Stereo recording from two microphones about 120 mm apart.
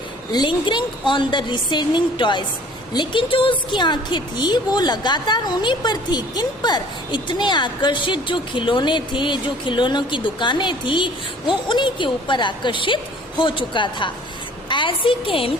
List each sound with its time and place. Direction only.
0.3 s a woman's voice: 40° left (ahead or behind)